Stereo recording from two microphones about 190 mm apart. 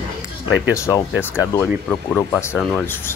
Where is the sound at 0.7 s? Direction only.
15° left (ahead or behind).